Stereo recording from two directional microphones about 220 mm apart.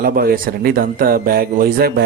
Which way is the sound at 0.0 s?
40° right (ahead or behind).